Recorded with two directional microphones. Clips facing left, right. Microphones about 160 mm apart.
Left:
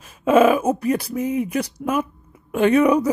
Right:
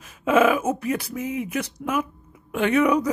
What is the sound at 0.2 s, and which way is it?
Speech, 35° left (ahead or behind).